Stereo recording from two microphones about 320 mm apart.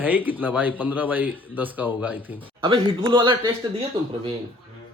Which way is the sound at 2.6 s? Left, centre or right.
Centre.